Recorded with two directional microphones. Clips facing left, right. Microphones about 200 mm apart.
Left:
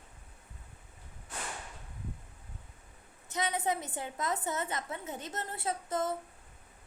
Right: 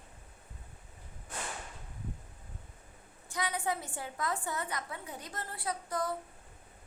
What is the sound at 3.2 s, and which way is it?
A woman's voice, 20° left (ahead or behind).